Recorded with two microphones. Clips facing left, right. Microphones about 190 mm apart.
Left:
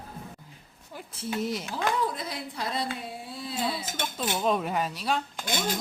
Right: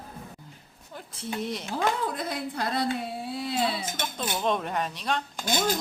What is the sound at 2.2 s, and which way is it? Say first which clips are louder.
Speech: right 4 dB; 55° right (ahead or behind).